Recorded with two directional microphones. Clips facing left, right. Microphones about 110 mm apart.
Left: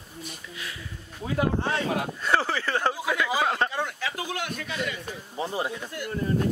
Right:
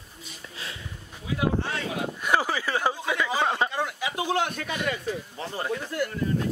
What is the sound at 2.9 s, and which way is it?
Speech, 5° left (ahead or behind).